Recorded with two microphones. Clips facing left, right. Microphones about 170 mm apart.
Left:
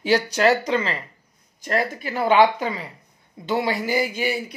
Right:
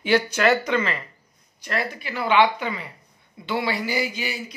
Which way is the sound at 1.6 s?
45° left (ahead or behind).